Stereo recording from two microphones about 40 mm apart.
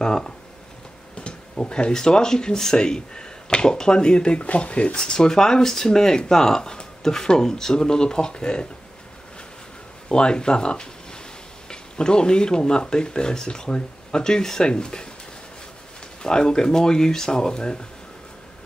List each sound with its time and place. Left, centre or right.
0.0 s speech: centre
10.0 s speech: left
16.2 s speech: centre